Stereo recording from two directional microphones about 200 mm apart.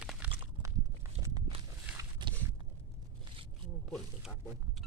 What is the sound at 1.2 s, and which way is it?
Walk, 20° right (ahead or behind).